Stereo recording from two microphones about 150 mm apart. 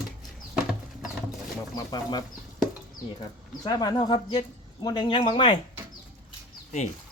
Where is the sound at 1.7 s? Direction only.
25° left (ahead or behind).